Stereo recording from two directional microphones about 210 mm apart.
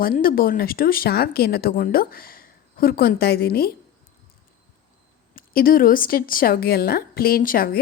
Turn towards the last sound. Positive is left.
turn(degrees=45)  # may be behind; listen again after turning